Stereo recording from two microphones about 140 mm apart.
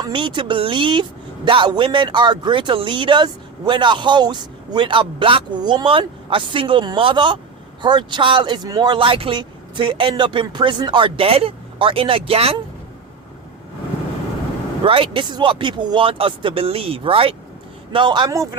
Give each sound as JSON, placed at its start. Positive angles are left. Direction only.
{"t": 0.0, "sound": "speech", "side_deg": -35}
{"t": 14.8, "sound": "speech", "side_deg": -40}